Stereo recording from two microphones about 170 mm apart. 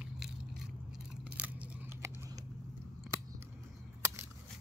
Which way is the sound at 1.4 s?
10° right (ahead or behind).